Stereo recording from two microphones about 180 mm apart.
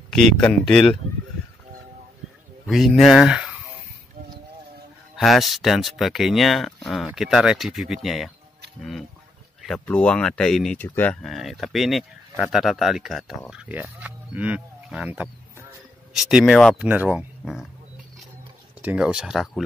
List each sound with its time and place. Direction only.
0.1 s speech: centre (ahead or behind)
2.6 s speech: centre (ahead or behind)
5.1 s speech: centre (ahead or behind)
9.6 s speech: 5° left (ahead or behind)
18.8 s speech: 5° right (ahead or behind)